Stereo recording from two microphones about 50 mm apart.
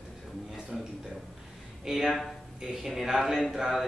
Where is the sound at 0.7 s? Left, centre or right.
Centre.